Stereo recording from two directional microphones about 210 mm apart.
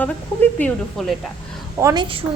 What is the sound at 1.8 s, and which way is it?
Speech, 20° right (ahead or behind).